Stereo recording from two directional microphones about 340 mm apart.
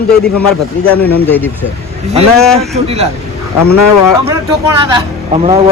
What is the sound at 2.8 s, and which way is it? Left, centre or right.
Speech, centre.